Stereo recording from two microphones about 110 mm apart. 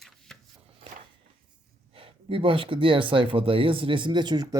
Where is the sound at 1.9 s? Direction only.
55° right (ahead or behind).